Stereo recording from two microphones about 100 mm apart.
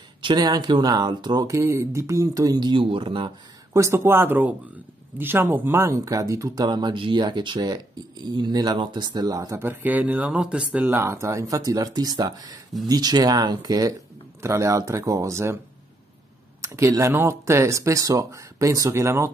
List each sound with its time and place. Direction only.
0.2 s speech: 45° right (ahead or behind)
1.5 s speech: 30° right (ahead or behind); by 3.3 s 55° right (ahead or behind)
3.7 s speech: 30° right (ahead or behind)
9.6 s speech: 20° right (ahead or behind)
11.0 s speech: 30° right (ahead or behind)
16.6 s speech: 30° right (ahead or behind)